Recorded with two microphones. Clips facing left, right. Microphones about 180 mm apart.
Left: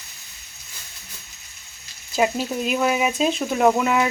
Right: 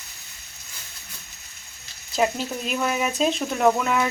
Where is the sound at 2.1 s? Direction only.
5° left (ahead or behind).